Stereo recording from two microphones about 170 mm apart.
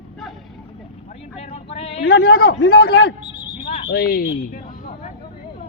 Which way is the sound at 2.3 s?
65° left (ahead or behind).